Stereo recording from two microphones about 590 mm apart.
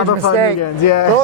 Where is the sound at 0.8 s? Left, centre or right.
Left.